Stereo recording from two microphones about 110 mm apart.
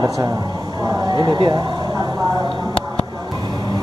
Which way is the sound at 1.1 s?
40° right (ahead or behind).